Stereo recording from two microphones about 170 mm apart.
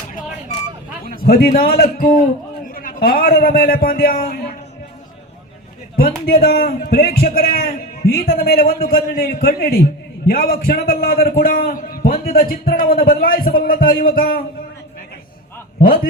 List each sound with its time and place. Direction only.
1.0 s a man's voice: 60° left (ahead or behind)
6.0 s a man's voice: 65° left (ahead or behind)